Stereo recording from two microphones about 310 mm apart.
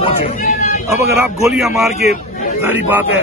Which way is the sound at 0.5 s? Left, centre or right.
Left.